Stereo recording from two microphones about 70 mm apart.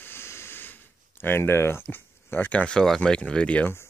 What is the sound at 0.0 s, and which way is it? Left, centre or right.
Speech, left.